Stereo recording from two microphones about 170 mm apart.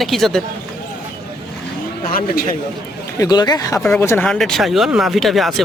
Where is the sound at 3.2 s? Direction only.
25° left (ahead or behind).